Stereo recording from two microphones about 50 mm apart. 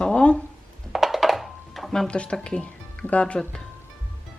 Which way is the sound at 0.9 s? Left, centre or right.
Centre.